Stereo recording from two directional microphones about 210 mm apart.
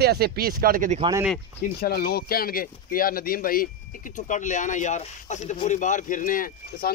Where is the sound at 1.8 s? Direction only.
50° left (ahead or behind).